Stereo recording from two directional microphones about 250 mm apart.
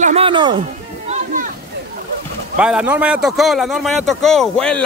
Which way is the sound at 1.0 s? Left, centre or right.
Right.